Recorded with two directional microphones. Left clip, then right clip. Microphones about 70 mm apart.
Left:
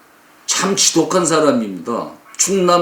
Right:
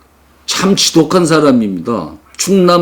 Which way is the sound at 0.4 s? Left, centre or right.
Left.